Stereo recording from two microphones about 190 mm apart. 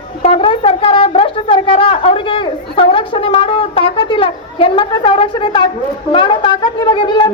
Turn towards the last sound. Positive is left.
turn(degrees=25)  # may be behind; listen again after turning